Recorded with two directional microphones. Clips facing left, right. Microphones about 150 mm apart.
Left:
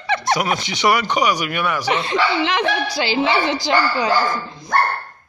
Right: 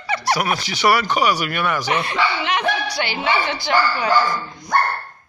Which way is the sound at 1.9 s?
25° left (ahead or behind).